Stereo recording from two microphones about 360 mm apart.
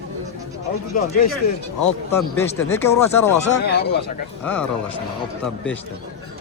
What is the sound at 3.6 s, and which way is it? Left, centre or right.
Speech, left.